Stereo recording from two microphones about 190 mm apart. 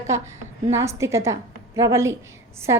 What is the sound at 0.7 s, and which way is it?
A woman's voice, 15° right (ahead or behind).